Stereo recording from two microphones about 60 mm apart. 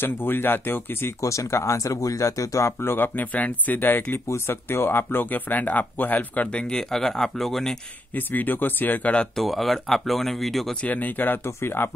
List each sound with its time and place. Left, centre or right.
0.0 s speech: left
1.2 s speech: left
2.8 s speech: left; by 7.7 s centre
8.1 s speech: left
9.3 s speech: centre
10.8 s speech: left
11.4 s speech: left